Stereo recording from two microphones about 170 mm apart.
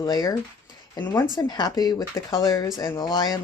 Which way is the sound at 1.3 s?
25° left (ahead or behind).